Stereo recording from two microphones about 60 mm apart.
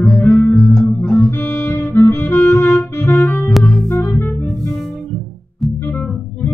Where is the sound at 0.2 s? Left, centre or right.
Left.